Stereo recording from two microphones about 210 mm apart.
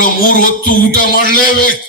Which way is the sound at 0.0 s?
40° left (ahead or behind).